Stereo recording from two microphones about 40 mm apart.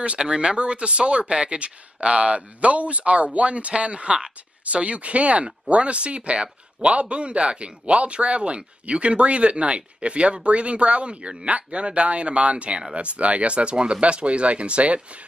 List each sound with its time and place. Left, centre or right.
0.2 s speech: right